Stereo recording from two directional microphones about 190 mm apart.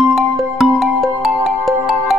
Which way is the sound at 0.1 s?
Centre (ahead or behind).